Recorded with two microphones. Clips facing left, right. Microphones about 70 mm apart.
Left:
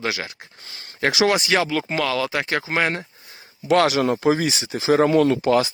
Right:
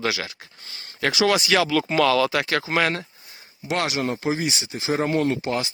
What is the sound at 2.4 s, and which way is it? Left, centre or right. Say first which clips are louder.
Speech: even; left.